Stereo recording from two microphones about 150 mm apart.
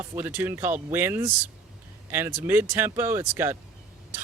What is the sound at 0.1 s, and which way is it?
Speech, 15° right (ahead or behind).